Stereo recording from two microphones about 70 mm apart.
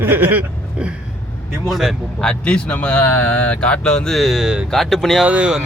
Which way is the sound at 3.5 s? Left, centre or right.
Centre.